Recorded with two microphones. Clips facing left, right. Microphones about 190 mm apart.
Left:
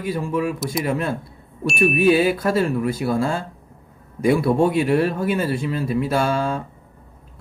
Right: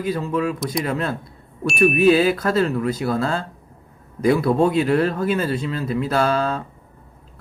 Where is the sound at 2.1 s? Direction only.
25° left (ahead or behind).